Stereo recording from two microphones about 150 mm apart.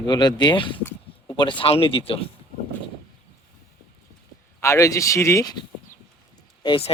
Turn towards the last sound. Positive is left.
turn(degrees=35)  # may be behind; listen again after turning